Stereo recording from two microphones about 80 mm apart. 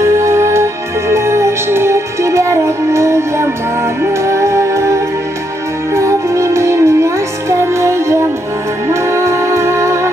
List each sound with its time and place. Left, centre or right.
0.0 s music: right